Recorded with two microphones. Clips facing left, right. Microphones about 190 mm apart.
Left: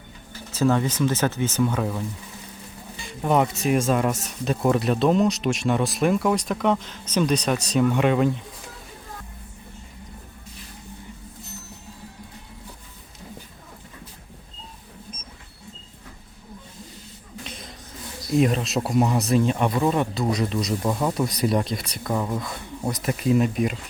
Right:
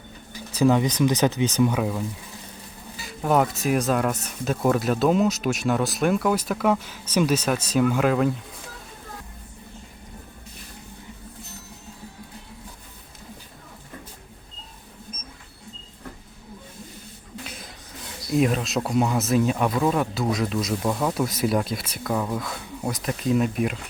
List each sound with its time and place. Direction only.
0.3 s speech: 15° right (ahead or behind)
17.4 s a sound: 5° right (ahead or behind)
18.3 s speech: centre (ahead or behind)